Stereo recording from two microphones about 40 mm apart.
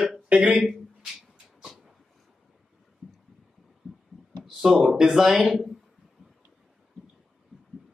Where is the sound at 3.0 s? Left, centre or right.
Centre.